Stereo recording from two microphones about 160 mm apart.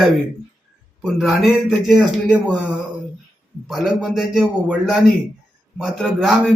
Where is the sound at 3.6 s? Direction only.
Centre (ahead or behind).